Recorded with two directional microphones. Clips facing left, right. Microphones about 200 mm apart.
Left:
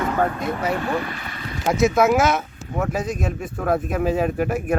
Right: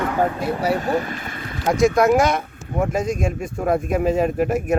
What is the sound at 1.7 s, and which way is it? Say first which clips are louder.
Speech: right 2 dB; 5° left (ahead or behind).